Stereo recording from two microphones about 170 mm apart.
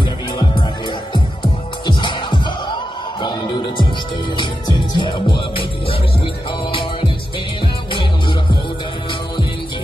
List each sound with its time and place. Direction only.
0.0 s music: 30° left (ahead or behind)